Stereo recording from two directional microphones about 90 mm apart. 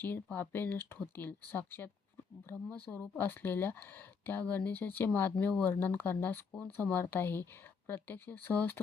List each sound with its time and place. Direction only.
0.0 s speech: 20° left (ahead or behind)